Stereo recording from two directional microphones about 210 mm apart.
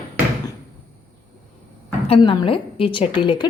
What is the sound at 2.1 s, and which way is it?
A woman's voice, 25° left (ahead or behind).